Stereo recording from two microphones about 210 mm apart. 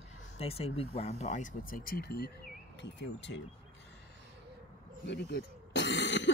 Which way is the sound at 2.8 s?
60° left (ahead or behind).